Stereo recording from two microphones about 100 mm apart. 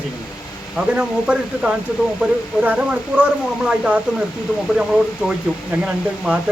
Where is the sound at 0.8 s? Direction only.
10° right (ahead or behind).